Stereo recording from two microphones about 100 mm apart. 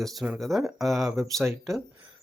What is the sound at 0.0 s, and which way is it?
Speech, centre (ahead or behind).